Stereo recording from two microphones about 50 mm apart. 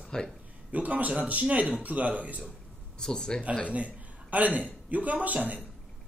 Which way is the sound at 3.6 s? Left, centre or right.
Right.